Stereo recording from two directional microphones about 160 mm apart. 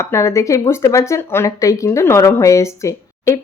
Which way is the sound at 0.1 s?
20° left (ahead or behind).